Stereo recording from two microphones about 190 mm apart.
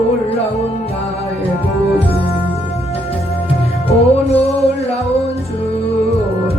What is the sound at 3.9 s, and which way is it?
Music, 35° left (ahead or behind).